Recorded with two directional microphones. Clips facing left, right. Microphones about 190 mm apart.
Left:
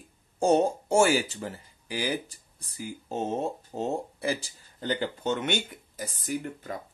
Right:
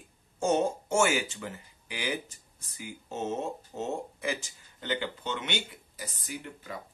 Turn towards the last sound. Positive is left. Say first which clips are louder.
# left 7 dB
turn(degrees=45)  # may be behind; listen again after turning